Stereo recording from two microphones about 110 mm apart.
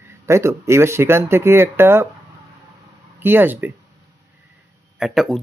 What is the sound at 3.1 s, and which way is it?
Speech, 20° right (ahead or behind).